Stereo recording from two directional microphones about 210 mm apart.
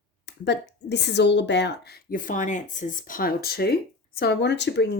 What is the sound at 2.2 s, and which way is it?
Speech, 40° left (ahead or behind).